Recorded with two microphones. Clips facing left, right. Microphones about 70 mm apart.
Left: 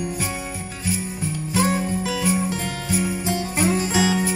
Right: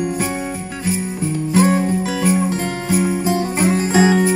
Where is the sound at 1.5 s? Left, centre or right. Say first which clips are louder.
Right 6 dB; right.